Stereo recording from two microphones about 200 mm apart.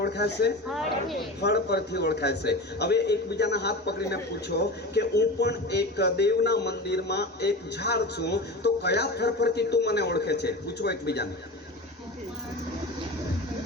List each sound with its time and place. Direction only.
0.0 s a man's voice: 55° left (ahead or behind)
0.7 s a woman's voice: centre (ahead or behind)
1.4 s a man's voice: 55° left (ahead or behind)